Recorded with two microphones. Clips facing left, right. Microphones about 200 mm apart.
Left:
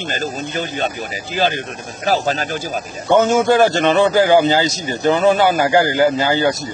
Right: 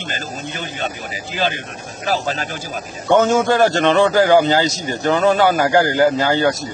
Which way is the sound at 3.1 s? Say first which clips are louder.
Left 1 dB; 5° left (ahead or behind).